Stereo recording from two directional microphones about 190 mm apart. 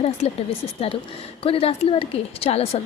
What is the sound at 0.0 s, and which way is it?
A woman's voice, 30° left (ahead or behind).